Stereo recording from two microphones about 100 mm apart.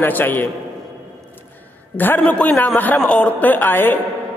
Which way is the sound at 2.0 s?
15° left (ahead or behind).